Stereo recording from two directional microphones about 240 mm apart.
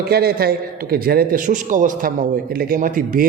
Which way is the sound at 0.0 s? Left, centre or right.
Right.